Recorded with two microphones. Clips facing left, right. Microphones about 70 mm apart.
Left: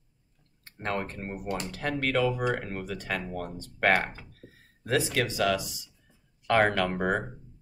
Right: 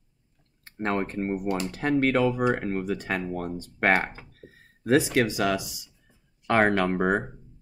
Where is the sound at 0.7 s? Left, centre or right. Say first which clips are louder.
Right 5 dB; right.